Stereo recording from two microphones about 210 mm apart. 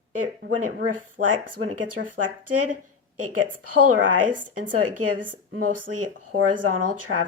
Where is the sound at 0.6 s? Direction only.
90° right.